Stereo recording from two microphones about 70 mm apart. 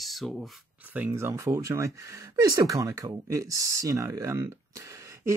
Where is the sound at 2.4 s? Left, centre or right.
Right.